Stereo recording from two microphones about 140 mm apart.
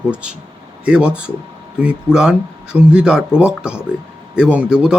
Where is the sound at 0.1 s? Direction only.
5° right (ahead or behind).